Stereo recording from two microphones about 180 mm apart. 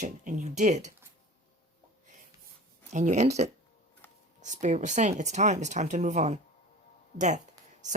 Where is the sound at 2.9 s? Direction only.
40° right (ahead or behind).